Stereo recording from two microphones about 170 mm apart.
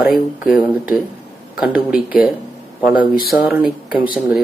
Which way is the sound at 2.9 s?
55° left (ahead or behind).